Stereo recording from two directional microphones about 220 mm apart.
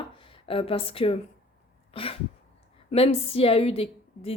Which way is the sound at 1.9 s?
25° left (ahead or behind).